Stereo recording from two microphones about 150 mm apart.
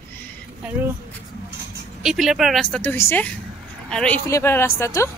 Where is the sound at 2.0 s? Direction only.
Centre (ahead or behind).